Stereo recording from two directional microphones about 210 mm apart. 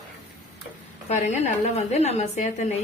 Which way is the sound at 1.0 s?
35° left (ahead or behind).